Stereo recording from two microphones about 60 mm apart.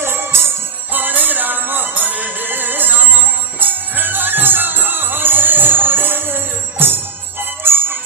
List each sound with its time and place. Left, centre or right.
0.0 s music: right
0.9 s music: right